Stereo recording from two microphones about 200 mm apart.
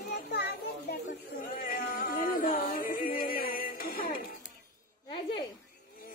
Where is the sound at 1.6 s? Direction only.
45° left (ahead or behind).